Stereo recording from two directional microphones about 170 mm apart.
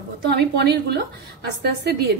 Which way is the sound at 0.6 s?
75° right (ahead or behind).